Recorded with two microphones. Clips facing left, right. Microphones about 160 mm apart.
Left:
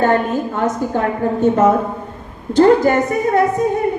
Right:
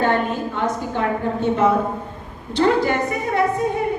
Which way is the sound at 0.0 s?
45° left (ahead or behind).